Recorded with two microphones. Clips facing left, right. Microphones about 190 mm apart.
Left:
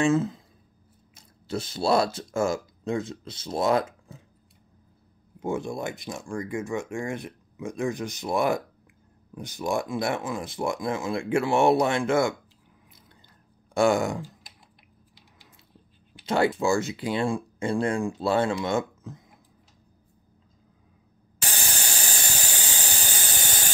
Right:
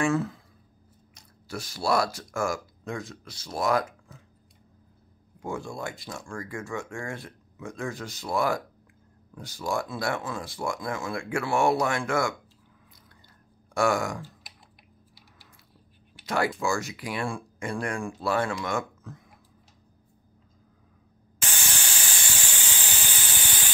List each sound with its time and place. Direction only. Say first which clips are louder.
0.0 s speech: left 3 dB; 20° left (ahead or behind)
1.5 s speech: left 3 dB; 25° left (ahead or behind)
5.4 s speech: left 4 dB; 20° left (ahead or behind)
13.7 s speech: left 3 dB; 20° left (ahead or behind)
16.3 s speech: left 4 dB; 25° left (ahead or behind)
21.4 s a sound: left 2 dB; 35° left (ahead or behind)